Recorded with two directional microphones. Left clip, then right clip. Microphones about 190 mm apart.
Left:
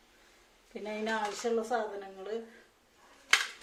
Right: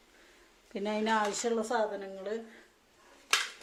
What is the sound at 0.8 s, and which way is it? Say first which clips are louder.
Speech: right 4 dB; 55° right (ahead or behind).